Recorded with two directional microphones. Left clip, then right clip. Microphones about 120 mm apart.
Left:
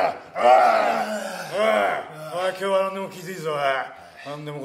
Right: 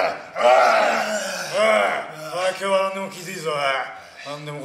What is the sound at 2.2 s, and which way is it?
Speech, 35° right (ahead or behind).